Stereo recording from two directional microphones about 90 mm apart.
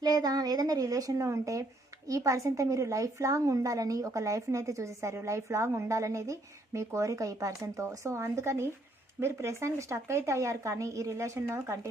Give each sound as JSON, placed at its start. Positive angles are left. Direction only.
{"t": 0.0, "sound": "a woman's voice", "side_deg": -45}